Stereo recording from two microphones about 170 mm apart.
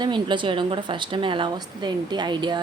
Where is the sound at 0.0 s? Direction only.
30° right (ahead or behind).